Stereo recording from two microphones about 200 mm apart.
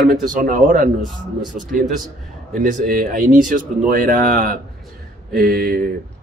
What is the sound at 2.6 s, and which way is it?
Speech, 45° right (ahead or behind).